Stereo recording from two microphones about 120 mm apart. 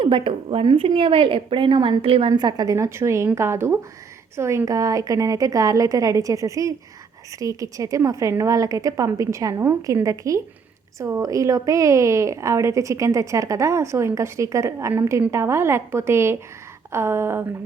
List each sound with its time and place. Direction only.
0.0 s a woman's voice: 45° right (ahead or behind); by 17.4 s 20° right (ahead or behind)